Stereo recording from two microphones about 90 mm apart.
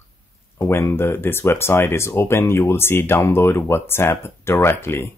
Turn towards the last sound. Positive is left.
turn(degrees=25)  # may be behind; listen again after turning